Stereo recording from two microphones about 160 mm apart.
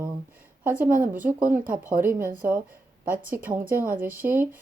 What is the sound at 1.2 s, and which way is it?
Speech, 10° right (ahead or behind).